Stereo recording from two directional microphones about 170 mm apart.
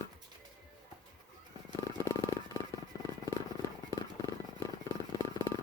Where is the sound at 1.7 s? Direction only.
25° right (ahead or behind).